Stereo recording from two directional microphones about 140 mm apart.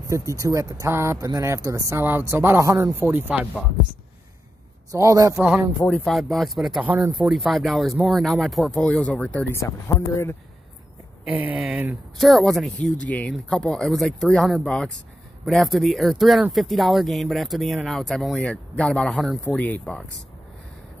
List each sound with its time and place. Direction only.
0.1 s speech: 20° right (ahead or behind)
4.9 s speech: 25° right (ahead or behind)
5.9 s speech: 5° left (ahead or behind)
6.9 s speech: 15° right (ahead or behind)
7.2 s speech: centre (ahead or behind)
9.6 s speech: 20° left (ahead or behind)
11.2 s speech: 10° right (ahead or behind)
12.2 s speech: centre (ahead or behind)